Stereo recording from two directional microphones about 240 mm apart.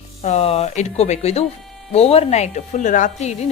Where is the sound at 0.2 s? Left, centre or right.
Left.